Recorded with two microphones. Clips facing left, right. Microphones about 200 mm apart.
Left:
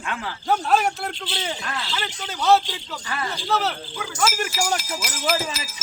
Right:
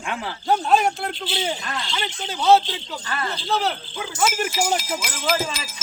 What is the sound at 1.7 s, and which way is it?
Speech, 5° left (ahead or behind).